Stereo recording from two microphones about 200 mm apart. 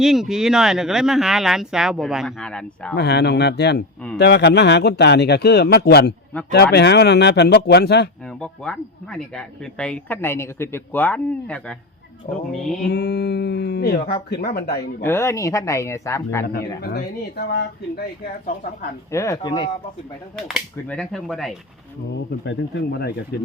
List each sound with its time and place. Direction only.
0.0 s speech: centre (ahead or behind)
2.9 s speech: 55° left (ahead or behind)
8.4 s speech: 5° left (ahead or behind)
12.9 s speech: 55° left (ahead or behind)
15.0 s speech: 10° left (ahead or behind)
16.5 s speech: 50° left (ahead or behind)
19.1 s speech: 15° left (ahead or behind)
20.3 s speech: 5° left (ahead or behind)
22.4 s speech: 55° left (ahead or behind)